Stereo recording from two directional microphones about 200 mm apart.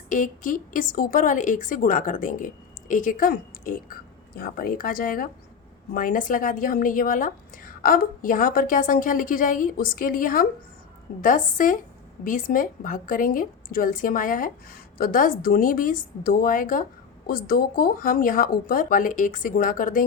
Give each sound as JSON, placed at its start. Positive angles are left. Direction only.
{"t": 0.1, "sound": "a woman's voice", "side_deg": 40}